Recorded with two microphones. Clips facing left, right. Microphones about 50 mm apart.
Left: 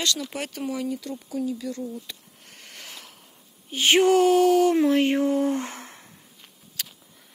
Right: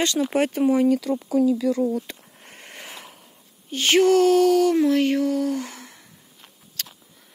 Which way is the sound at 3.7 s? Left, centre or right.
Centre.